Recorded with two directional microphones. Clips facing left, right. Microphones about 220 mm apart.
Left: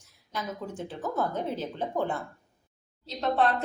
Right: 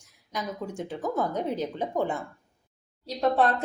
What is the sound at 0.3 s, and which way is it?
Speech, 10° right (ahead or behind).